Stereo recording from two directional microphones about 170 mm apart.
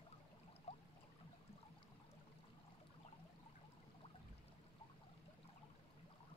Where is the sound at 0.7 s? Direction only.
35° left (ahead or behind).